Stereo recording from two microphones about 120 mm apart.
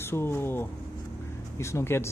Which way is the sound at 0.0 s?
20° left (ahead or behind).